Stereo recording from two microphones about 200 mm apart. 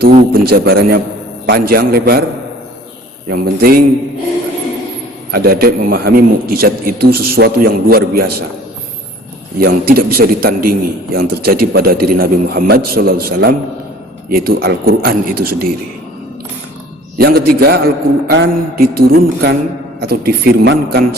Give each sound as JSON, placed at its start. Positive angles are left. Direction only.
{"t": 0.0, "sound": "a man's voice", "side_deg": -50}
{"t": 3.2, "sound": "a man's voice", "side_deg": -50}
{"t": 5.3, "sound": "a man's voice", "side_deg": -50}
{"t": 9.6, "sound": "a man's voice", "side_deg": -50}
{"t": 17.2, "sound": "a man's voice", "side_deg": -50}